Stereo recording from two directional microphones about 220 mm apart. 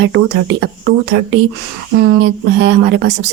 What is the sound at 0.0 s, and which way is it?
Speech, 55° right (ahead or behind).